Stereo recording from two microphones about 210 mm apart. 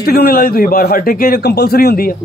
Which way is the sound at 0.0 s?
45° left (ahead or behind).